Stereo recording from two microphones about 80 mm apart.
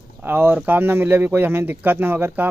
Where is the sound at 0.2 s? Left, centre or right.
Right.